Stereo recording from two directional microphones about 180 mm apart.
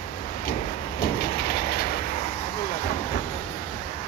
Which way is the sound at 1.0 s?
60° left (ahead or behind).